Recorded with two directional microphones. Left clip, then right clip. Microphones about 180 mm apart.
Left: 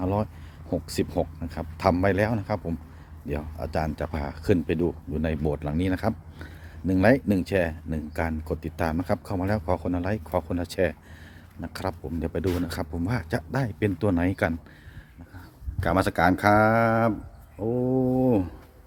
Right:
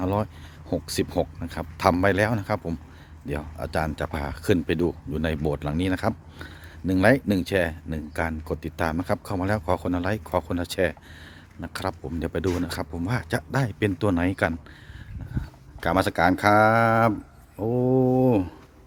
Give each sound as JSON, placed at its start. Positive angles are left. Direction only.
{"t": 0.0, "sound": "a sound", "side_deg": -20}
{"t": 0.7, "sound": "speech", "side_deg": -15}
{"t": 12.6, "sound": "speech", "side_deg": -10}
{"t": 15.8, "sound": "speech", "side_deg": -10}
{"t": 17.6, "sound": "mantra", "side_deg": -35}